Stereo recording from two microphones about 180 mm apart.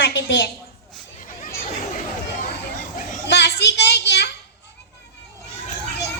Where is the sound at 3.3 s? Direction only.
70° left (ahead or behind).